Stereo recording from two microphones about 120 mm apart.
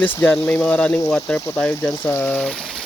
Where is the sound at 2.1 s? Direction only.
15° left (ahead or behind).